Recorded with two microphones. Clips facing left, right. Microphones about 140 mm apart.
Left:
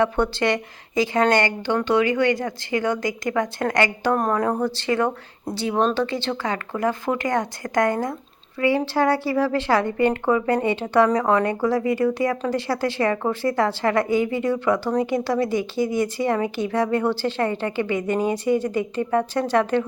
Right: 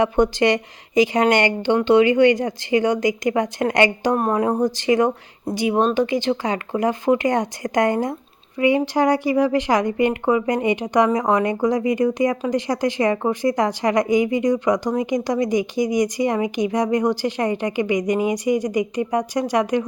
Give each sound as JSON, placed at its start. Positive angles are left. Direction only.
{"t": 0.0, "sound": "a woman's voice", "side_deg": -15}